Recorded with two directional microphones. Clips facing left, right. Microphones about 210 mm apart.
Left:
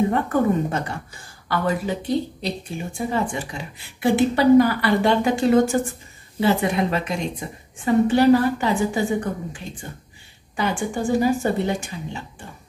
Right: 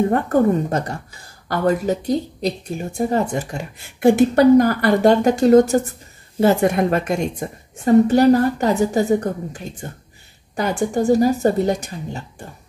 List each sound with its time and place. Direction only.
0.1 s a woman's voice: 40° right (ahead or behind)